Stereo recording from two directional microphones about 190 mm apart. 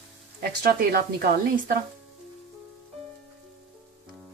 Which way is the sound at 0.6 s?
55° right (ahead or behind).